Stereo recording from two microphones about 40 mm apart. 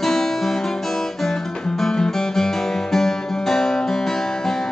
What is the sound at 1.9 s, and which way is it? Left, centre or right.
Guitar, centre.